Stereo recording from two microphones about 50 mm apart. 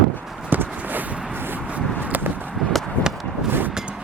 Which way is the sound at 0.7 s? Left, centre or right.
Right.